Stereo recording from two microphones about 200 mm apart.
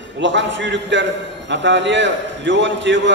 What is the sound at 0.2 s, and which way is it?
A man's voice, 65° right (ahead or behind).